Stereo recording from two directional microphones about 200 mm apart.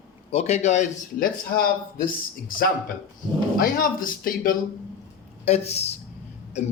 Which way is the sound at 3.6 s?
45° left (ahead or behind).